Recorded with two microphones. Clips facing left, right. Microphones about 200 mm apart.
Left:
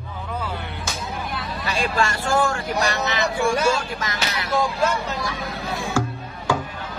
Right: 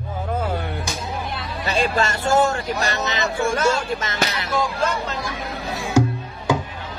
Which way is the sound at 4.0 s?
25° right (ahead or behind).